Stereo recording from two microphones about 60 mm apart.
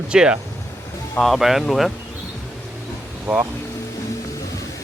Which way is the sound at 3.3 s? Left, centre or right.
Right.